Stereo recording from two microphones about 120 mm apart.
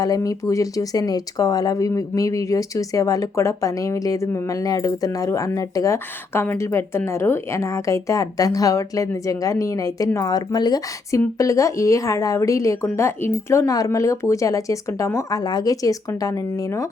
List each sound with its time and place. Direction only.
0.0 s a woman's voice: 30° left (ahead or behind)